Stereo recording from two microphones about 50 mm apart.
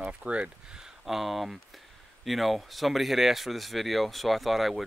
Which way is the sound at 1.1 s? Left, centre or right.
Centre.